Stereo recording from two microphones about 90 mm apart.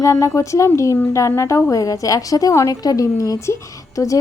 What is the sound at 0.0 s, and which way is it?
A woman's voice, 35° left (ahead or behind).